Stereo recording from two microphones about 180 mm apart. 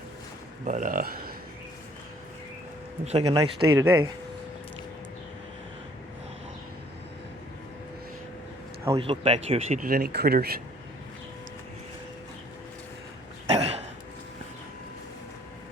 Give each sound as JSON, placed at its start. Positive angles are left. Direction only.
{"t": 0.6, "sound": "speech", "side_deg": -45}
{"t": 3.0, "sound": "speech", "side_deg": -35}
{"t": 3.3, "sound": "speech", "side_deg": -15}
{"t": 9.0, "sound": "speech", "side_deg": -30}
{"t": 9.8, "sound": "speech", "side_deg": -60}
{"t": 13.6, "sound": "a sound", "side_deg": -35}